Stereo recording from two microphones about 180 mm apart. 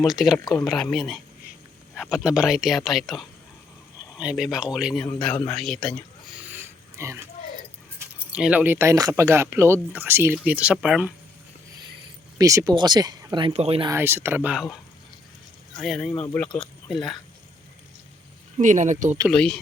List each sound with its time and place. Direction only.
0.0 s speech: centre (ahead or behind)
5.0 s speech: 5° left (ahead or behind)
6.5 s oink: 15° right (ahead or behind)
7.9 s speech: 5° right (ahead or behind)
12.4 s speech: 20° right (ahead or behind)
13.9 s speech: 15° right (ahead or behind)
15.8 s speech: centre (ahead or behind)
18.5 s speech: 45° right (ahead or behind)
19.3 s speech: 5° left (ahead or behind)